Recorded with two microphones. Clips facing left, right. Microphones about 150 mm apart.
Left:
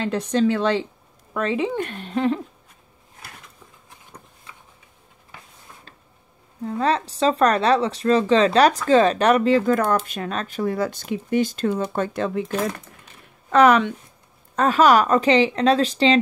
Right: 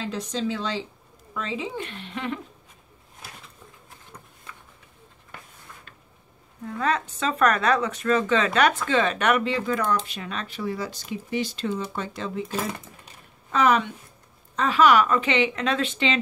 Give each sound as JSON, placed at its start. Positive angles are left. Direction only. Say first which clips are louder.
{"t": 0.0, "sound": "a woman's voice", "louder": "left 8 dB", "side_deg": 60}
{"t": 6.6, "sound": "speech", "louder": "left 4 dB", "side_deg": 30}
{"t": 13.5, "sound": "speech", "louder": "left 6 dB", "side_deg": 70}
{"t": 14.5, "sound": "speech", "louder": "left 3 dB", "side_deg": 45}